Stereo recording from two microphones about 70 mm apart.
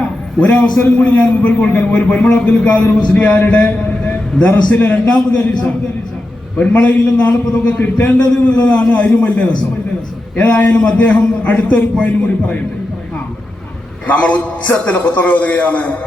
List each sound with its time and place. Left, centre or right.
0.0 s a sound: centre
0.8 s a man's voice: centre
14.1 s a man's voice: left